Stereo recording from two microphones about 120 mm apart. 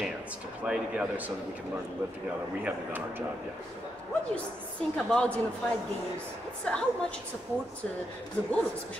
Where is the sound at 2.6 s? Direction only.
15° right (ahead or behind).